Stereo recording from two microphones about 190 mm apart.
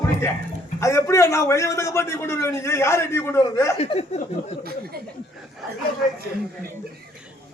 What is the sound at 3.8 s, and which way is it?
Speech, 35° left (ahead or behind).